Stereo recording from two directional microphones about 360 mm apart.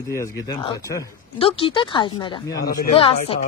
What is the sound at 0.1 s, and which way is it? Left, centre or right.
Speech, centre.